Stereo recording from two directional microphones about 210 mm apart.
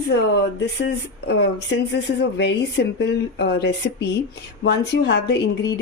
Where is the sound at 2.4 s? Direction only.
55° left (ahead or behind).